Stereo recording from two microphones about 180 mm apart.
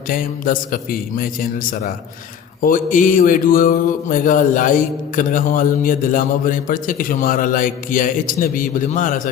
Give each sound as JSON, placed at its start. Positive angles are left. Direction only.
{"t": 0.1, "sound": "mantra", "side_deg": 50}